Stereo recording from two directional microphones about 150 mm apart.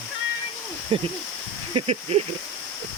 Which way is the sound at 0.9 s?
35° right (ahead or behind).